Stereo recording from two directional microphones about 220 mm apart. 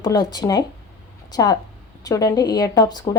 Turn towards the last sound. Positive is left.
turn(degrees=15)  # may be behind; listen again after turning